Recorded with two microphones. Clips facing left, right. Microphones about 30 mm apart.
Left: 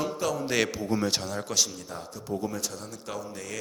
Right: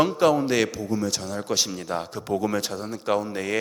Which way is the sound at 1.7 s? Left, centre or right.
Right.